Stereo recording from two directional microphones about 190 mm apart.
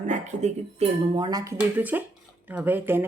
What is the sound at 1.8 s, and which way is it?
Speech, 10° right (ahead or behind).